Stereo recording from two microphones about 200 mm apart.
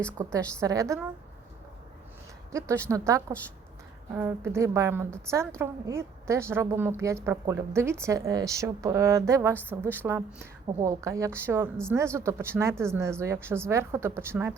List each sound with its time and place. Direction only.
0.2 s a woman's voice: 15° right (ahead or behind)
2.5 s a woman's voice: 15° right (ahead or behind)